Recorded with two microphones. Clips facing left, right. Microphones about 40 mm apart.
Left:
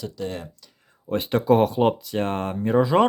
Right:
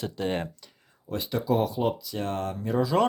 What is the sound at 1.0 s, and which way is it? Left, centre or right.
Speech, left.